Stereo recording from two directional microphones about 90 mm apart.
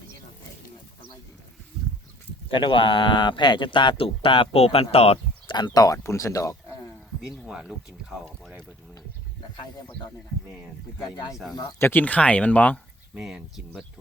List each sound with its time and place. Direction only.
2.5 s speech: 65° left (ahead or behind); by 5.5 s 90° left
5.5 s speech: 50° left (ahead or behind)
6.0 s speech: 35° left (ahead or behind)
7.4 s speech: 10° right (ahead or behind)
11.8 s speech: 20° left (ahead or behind)
13.1 s speech: 10° right (ahead or behind)